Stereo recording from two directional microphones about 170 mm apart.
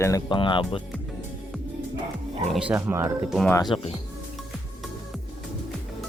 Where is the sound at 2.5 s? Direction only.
10° right (ahead or behind).